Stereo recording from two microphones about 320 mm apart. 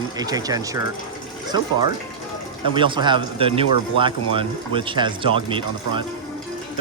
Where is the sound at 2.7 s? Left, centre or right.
Centre.